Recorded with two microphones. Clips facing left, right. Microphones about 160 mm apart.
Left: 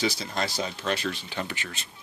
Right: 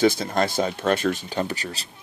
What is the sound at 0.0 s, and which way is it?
Speech, 50° right (ahead or behind).